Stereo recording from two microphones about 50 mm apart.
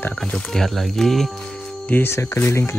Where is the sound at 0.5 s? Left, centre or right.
Centre.